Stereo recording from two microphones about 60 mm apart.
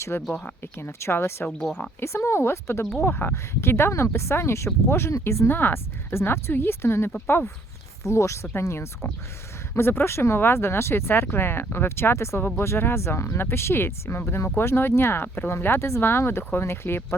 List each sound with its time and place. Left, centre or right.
0.1 s speech: left
0.9 s speech: left
5.5 s speech: left
8.0 s speech: left